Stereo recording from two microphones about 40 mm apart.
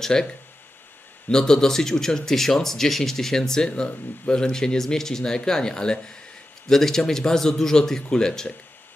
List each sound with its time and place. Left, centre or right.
0.0 s speech: centre